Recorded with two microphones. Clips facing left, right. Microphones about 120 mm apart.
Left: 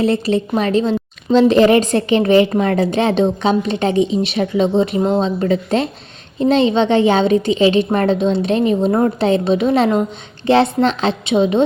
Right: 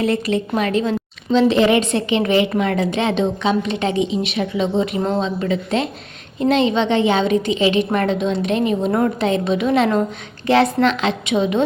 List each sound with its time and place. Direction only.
0.0 s a woman's voice: 30° left (ahead or behind)